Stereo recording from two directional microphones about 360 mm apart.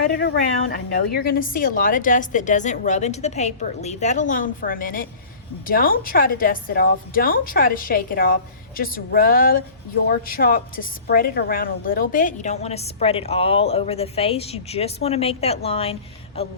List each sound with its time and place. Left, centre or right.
0.0 s a woman's voice: left